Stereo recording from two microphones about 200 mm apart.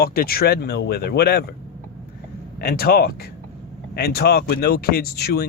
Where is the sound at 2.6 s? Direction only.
50° left (ahead or behind).